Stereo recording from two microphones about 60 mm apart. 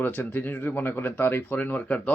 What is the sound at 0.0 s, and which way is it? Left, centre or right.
Speech, left.